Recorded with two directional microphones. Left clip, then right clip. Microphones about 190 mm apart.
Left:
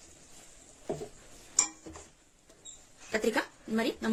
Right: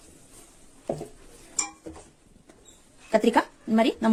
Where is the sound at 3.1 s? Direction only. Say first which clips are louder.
Right 9 dB; 40° right (ahead or behind).